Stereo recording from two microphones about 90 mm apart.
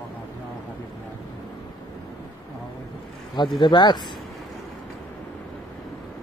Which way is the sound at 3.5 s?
55° left (ahead or behind).